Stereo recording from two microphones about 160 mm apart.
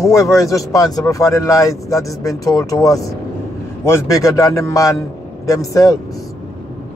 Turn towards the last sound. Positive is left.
turn(degrees=20)  # may be behind; listen again after turning